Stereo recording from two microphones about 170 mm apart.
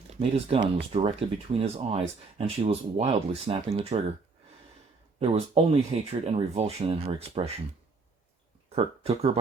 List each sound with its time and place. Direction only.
0.1 s speech: 35° right (ahead or behind)
5.2 s speech: 35° right (ahead or behind)
8.7 s speech: 35° right (ahead or behind)